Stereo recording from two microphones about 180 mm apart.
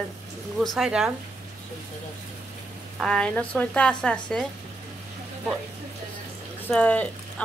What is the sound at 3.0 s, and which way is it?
A woman's voice, 5° left (ahead or behind).